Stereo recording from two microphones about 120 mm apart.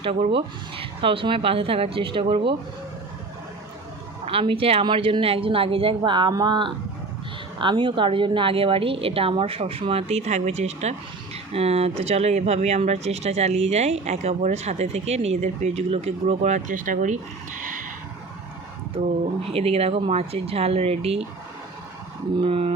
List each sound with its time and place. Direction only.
0.0 s a woman's voice: 50° right (ahead or behind)
4.3 s a woman's voice: 50° right (ahead or behind)
6.0 s a woman's voice: 40° right (ahead or behind); by 17.8 s 90° right
19.5 s speech: 55° right (ahead or behind)
22.4 s speech: 55° right (ahead or behind)